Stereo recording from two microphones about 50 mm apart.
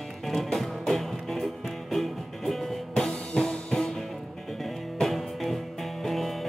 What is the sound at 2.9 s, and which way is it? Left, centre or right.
Music, centre.